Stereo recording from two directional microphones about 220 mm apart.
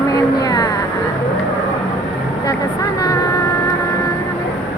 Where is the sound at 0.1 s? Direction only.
15° left (ahead or behind).